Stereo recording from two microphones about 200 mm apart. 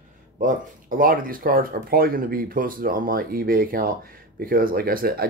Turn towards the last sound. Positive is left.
turn(degrees=-50)  # may be behind; listen again after turning